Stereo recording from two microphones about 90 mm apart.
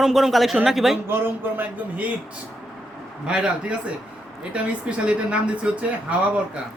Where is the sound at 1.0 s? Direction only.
25° right (ahead or behind).